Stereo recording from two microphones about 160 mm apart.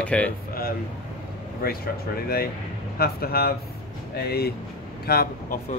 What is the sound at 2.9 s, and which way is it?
Speech, 75° left (ahead or behind).